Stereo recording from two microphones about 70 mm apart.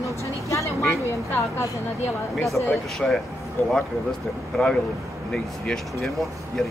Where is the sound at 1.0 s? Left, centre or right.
Left.